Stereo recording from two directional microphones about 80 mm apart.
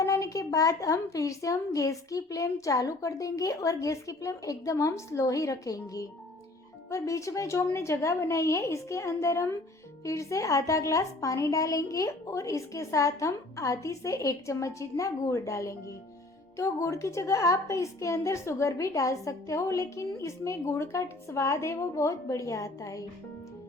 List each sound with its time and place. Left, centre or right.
0.0 s a woman's voice: left